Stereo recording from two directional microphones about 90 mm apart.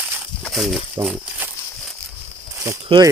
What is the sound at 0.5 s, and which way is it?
Speech, centre (ahead or behind).